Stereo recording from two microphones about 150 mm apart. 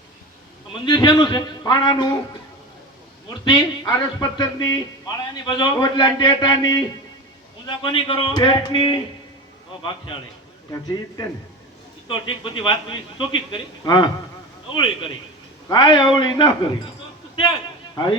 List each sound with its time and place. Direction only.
0.7 s speech: 30° left (ahead or behind)
3.4 s a man's voice: 25° left (ahead or behind)
10.7 s a man's voice: 25° left (ahead or behind)
15.7 s a man's voice: 30° left (ahead or behind)
17.9 s speech: 30° left (ahead or behind)